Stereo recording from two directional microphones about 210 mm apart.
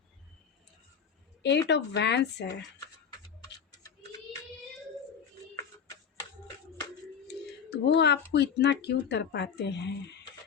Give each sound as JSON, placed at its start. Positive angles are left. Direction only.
{"t": 1.4, "sound": "speech", "side_deg": 55}
{"t": 7.3, "sound": "speech", "side_deg": 55}